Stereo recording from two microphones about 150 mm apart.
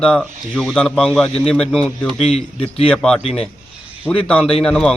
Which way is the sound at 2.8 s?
5° left (ahead or behind).